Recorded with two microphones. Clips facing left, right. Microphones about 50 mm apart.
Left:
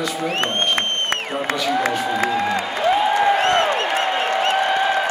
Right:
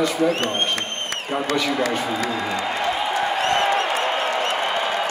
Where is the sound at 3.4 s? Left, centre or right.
Left.